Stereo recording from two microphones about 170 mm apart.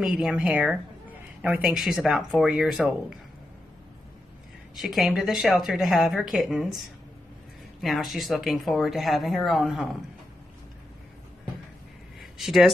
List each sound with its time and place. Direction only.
0.0 s speech: 5° right (ahead or behind)
4.8 s speech: centre (ahead or behind)
7.8 s speech: centre (ahead or behind)
12.2 s speech: centre (ahead or behind)